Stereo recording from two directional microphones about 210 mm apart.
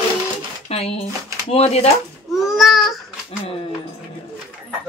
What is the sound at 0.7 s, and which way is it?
Speech, 30° left (ahead or behind).